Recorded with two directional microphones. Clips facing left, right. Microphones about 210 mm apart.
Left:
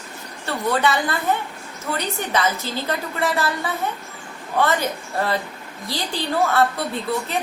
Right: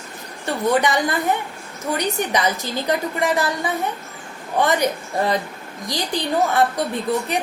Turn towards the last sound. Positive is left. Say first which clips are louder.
# right 3 dB
turn(degrees=-15)  # may be behind; listen again after turning